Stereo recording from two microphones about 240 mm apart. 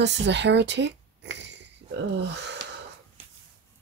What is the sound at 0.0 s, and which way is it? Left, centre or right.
Speech, right.